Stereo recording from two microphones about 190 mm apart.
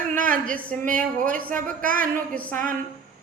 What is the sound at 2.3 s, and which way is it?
Music, 10° left (ahead or behind).